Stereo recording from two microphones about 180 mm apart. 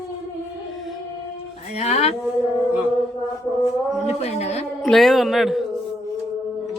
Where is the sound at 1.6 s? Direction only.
35° left (ahead or behind).